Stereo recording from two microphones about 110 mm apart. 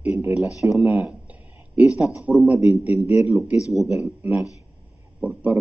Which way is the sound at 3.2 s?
25° right (ahead or behind).